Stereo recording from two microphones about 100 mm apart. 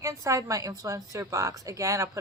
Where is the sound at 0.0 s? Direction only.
30° right (ahead or behind).